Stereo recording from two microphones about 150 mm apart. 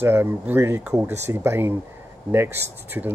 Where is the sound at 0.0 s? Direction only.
15° right (ahead or behind).